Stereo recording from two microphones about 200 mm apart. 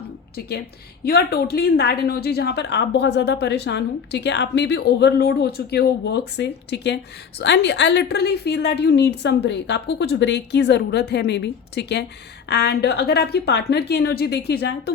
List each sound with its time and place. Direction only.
0.3 s speech: 55° left (ahead or behind)